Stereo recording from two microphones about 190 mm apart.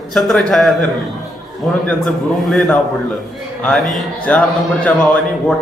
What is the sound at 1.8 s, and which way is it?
A man's voice, centre (ahead or behind).